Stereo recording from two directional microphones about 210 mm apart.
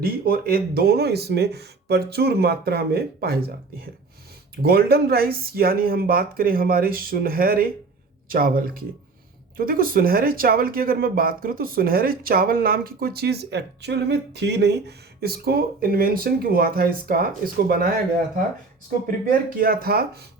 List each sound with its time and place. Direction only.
0.0 s speech: 45° right (ahead or behind)
4.5 s speech: 45° right (ahead or behind)
19.5 s speech: 45° right (ahead or behind)